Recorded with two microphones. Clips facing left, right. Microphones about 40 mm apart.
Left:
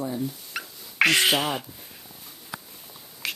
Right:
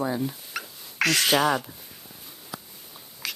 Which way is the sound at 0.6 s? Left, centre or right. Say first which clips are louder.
Left 1 dB; centre.